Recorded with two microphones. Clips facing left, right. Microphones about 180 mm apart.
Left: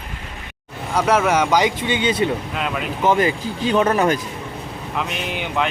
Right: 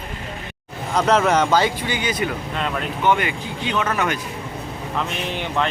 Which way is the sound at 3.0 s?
35° left (ahead or behind).